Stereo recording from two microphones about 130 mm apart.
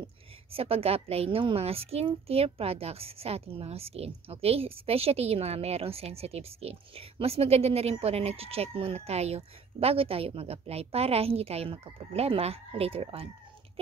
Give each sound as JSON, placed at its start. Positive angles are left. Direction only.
{"t": 0.0, "sound": "a woman's voice", "side_deg": -50}